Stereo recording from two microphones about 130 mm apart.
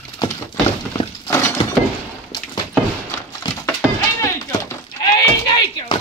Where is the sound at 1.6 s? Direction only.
45° left (ahead or behind).